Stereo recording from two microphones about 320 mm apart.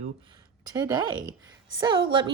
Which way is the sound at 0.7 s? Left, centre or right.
Centre.